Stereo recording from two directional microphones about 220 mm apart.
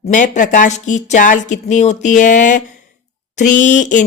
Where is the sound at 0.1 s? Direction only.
35° left (ahead or behind).